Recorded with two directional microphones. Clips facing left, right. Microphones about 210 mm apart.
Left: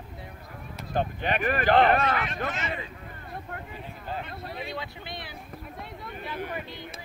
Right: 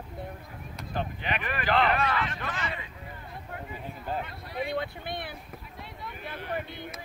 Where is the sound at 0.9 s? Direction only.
45° left (ahead or behind).